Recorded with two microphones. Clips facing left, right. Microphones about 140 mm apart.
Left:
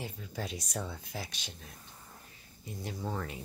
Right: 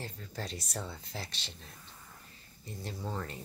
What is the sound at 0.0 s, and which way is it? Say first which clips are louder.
Speech: left 2 dB; 5° left (ahead or behind).